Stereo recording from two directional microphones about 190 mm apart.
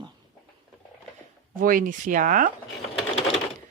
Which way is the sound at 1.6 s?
45° right (ahead or behind).